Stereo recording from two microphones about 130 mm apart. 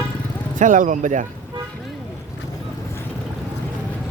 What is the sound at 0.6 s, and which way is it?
Speech, 80° right.